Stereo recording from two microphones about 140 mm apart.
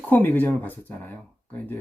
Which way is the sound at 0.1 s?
15° left (ahead or behind).